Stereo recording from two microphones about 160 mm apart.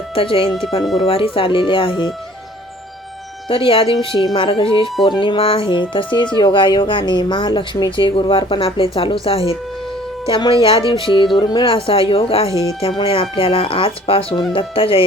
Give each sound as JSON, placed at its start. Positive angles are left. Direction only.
{"t": 0.1, "sound": "a woman's voice", "side_deg": 35}
{"t": 3.5, "sound": "a woman's voice", "side_deg": 35}
{"t": 12.5, "sound": "speech", "side_deg": -20}
{"t": 13.0, "sound": "a woman's voice", "side_deg": 30}